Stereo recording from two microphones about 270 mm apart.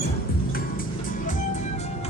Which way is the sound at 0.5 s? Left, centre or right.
Left.